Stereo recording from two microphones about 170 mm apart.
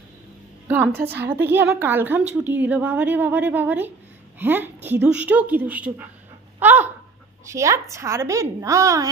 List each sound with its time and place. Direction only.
0.7 s a woman's voice: 10° right (ahead or behind)
6.6 s a sound: 10° right (ahead or behind)
7.4 s a woman's voice: 15° right (ahead or behind)